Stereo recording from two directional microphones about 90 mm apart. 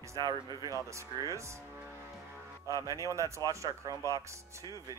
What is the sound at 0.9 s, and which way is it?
Speech, 35° right (ahead or behind).